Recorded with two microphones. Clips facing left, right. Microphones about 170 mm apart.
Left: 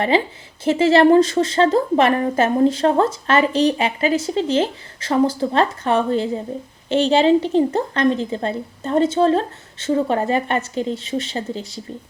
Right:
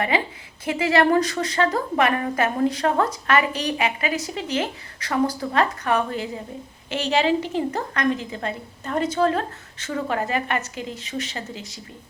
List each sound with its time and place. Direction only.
0.1 s a woman's voice: 30° left (ahead or behind)